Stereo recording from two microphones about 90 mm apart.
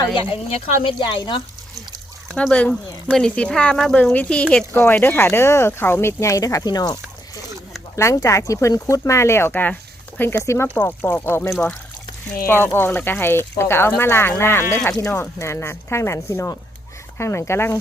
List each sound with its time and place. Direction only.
0.8 s speech: 70° left (ahead or behind)
2.3 s speech: 10° left (ahead or behind)
4.7 s speech: 25° left (ahead or behind); by 7.0 s 45° left (ahead or behind)
7.9 s speech: 35° left (ahead or behind)
9.5 s speech: 20° left (ahead or behind)